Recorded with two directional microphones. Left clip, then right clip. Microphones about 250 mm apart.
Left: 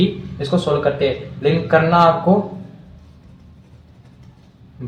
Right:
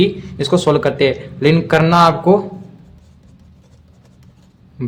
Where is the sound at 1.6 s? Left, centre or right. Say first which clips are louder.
Right 1 dB; right.